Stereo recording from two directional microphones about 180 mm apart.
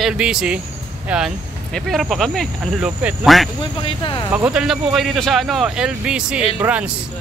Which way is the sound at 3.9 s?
25° left (ahead or behind).